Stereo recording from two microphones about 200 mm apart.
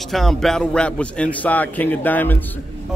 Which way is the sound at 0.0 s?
Centre (ahead or behind).